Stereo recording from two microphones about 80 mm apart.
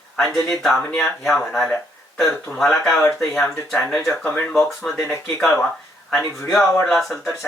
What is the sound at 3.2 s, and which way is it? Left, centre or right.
Speech, left.